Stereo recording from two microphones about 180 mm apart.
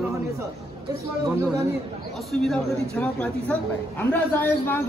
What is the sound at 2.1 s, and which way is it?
A woman's voice, centre (ahead or behind).